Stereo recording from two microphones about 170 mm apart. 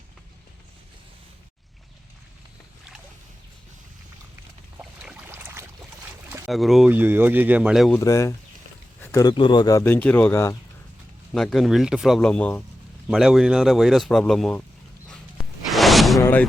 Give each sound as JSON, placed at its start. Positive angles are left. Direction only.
{"t": 4.8, "sound": "boat", "side_deg": -5}
{"t": 6.5, "sound": "speech", "side_deg": 0}
{"t": 7.9, "sound": "a man's voice", "side_deg": 20}
{"t": 9.0, "sound": "a sound", "side_deg": 20}
{"t": 9.3, "sound": "a man's voice", "side_deg": 25}
{"t": 11.3, "sound": "a man's voice", "side_deg": 0}
{"t": 13.1, "sound": "a man's voice", "side_deg": 0}
{"t": 15.1, "sound": "a sound", "side_deg": 0}
{"t": 16.2, "sound": "music", "side_deg": 10}